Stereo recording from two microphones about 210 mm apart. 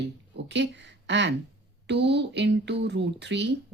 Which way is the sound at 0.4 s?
55° right (ahead or behind).